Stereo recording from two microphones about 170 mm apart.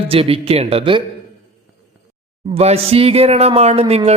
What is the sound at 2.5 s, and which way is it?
Speech, 35° right (ahead or behind).